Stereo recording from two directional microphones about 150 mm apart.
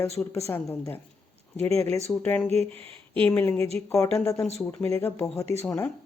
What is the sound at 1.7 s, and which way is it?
Speech, 45° right (ahead or behind).